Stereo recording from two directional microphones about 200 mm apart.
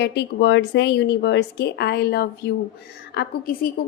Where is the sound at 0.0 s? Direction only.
55° left (ahead or behind).